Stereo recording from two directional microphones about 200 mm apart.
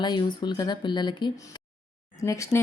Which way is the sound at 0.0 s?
20° left (ahead or behind).